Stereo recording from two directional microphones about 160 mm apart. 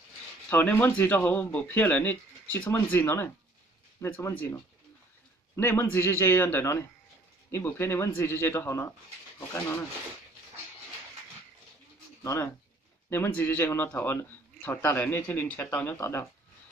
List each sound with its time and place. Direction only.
0.5 s a man's voice: 10° left (ahead or behind)
5.5 s a man's voice: 15° left (ahead or behind)
12.2 s a man's voice: 15° left (ahead or behind)